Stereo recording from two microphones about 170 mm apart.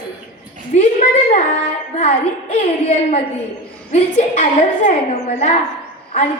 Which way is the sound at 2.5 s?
40° left (ahead or behind).